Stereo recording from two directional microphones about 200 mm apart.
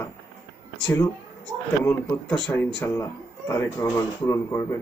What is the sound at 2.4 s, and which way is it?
Speech, 10° left (ahead or behind).